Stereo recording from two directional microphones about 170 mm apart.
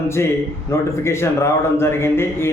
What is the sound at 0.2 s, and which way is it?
A man's voice, 15° left (ahead or behind).